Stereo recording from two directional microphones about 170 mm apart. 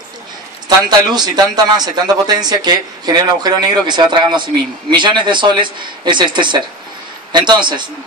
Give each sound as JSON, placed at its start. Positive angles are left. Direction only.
{"t": 0.7, "sound": "speech", "side_deg": -25}